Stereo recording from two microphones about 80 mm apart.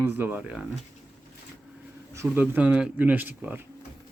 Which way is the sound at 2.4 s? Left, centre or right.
Centre.